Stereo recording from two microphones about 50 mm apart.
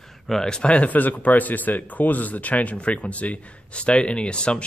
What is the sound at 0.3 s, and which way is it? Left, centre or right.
Speech, centre.